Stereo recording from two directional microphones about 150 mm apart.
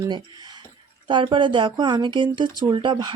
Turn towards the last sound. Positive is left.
turn(degrees=-30)  # may be behind; listen again after turning